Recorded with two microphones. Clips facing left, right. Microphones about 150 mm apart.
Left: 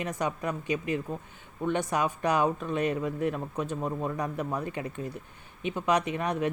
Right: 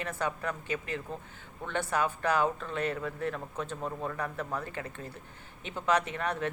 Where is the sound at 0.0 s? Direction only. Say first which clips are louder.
Left 3 dB; 15° left (ahead or behind).